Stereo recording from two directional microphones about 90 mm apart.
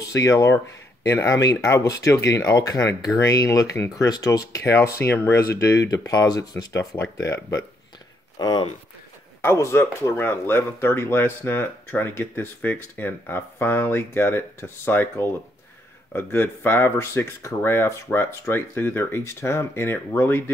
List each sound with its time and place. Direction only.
0.0 s speech: 40° left (ahead or behind)
8.4 s speech: 50° left (ahead or behind)
9.4 s speech: 30° left (ahead or behind)